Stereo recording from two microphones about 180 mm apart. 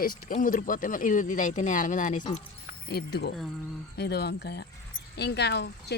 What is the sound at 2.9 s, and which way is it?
Speech, 65° left (ahead or behind).